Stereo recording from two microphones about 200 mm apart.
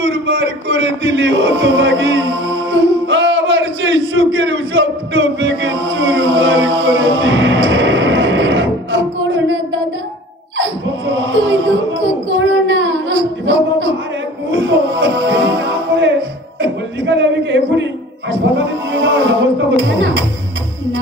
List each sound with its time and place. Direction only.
0.0 s music: 65° right (ahead or behind)
2.7 s a sound: 65° right (ahead or behind)
10.6 s a sound: 65° right (ahead or behind)
14.5 s music: 65° right (ahead or behind)
16.6 s a man's voice: 65° right (ahead or behind)
18.6 s music: 65° right (ahead or behind)